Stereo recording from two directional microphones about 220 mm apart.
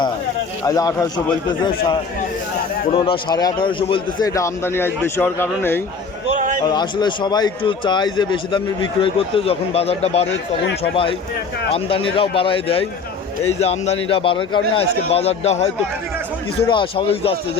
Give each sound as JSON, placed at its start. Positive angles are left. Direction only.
{"t": 0.6, "sound": "a man's voice", "side_deg": 15}
{"t": 2.9, "sound": "a man's voice", "side_deg": 20}
{"t": 6.3, "sound": "a sound", "side_deg": -35}
{"t": 6.7, "sound": "a man's voice", "side_deg": 20}
{"t": 11.7, "sound": "a man's voice", "side_deg": 25}